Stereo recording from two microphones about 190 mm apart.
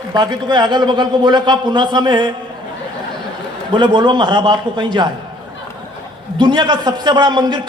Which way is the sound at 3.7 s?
25° right (ahead or behind).